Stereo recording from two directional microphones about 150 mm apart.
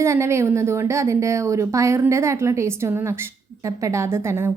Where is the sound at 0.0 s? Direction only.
20° right (ahead or behind).